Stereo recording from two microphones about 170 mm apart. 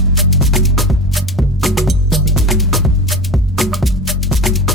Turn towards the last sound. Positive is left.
turn(degrees=0)  # may be behind; listen again after turning